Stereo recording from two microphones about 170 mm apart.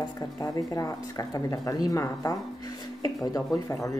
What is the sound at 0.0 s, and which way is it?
Speech, 20° left (ahead or behind).